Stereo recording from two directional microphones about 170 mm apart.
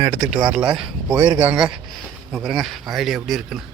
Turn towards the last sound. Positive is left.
turn(degrees=-5)  # may be behind; listen again after turning